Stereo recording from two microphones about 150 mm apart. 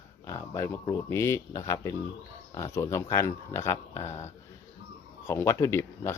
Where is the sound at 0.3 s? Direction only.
20° left (ahead or behind).